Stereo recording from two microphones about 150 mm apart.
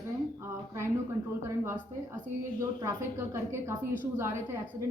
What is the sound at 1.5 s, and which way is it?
Speech, 15° right (ahead or behind).